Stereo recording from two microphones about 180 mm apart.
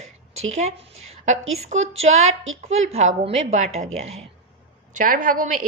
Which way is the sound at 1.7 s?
90° right.